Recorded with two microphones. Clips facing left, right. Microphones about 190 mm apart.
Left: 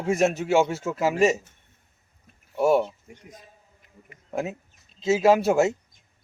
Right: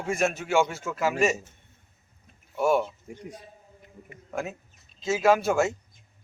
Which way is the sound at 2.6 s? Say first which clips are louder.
Left 3 dB; 25° left (ahead or behind).